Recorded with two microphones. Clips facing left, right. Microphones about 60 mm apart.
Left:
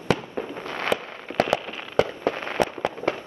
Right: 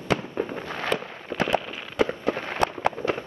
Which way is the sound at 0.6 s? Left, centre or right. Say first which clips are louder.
Left 6 dB; left.